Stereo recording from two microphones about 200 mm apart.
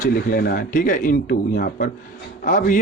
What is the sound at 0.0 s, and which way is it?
A man's voice, 45° left (ahead or behind).